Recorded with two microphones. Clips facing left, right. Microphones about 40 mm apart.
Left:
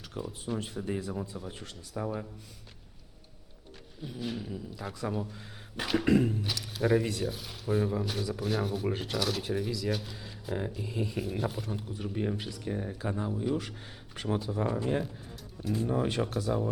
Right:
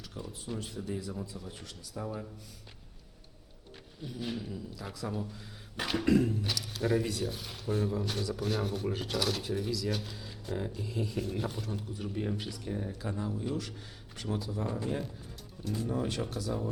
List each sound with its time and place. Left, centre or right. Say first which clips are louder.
0.1 s speech: left 5 dB; left
4.2 s speech: left 1 dB; centre
5.7 s beatboxing: left 3 dB; centre
6.1 s speech: even; left
6.6 s speech: left 4 dB; centre
8.9 s speech: left 2 dB; centre
9.1 s speech: even; centre
11.2 s speech: left 2 dB; centre; by 13.3 s left
13.3 s speech: left 7 dB; centre
14.2 s speech: left 4 dB; left
15.8 s speech: left 4 dB; left